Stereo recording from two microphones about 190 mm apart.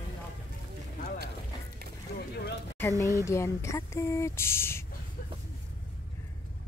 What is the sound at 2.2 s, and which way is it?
Speech, 55° left (ahead or behind).